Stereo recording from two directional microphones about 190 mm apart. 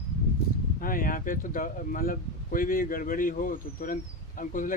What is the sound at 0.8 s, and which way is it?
Speech, 45° left (ahead or behind).